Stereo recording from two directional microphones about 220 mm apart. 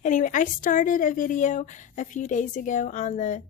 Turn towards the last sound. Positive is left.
turn(degrees=35)  # may be behind; listen again after turning